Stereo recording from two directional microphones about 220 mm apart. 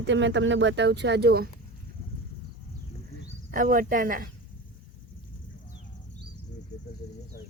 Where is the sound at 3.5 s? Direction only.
40° right (ahead or behind).